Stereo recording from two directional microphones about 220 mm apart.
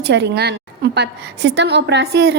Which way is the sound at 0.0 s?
50° right (ahead or behind).